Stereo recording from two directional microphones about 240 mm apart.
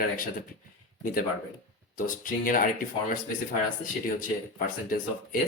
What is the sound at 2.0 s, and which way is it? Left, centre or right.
Speech, left.